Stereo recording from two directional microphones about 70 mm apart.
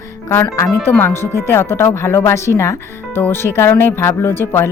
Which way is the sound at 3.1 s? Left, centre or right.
Left.